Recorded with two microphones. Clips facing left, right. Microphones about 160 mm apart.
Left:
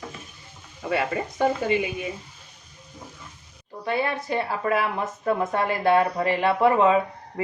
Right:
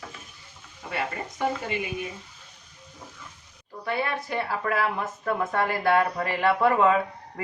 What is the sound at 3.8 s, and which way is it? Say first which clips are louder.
Speech: left 3 dB; 25° left (ahead or behind).